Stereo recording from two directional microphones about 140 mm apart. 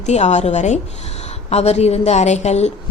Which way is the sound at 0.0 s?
55° left (ahead or behind).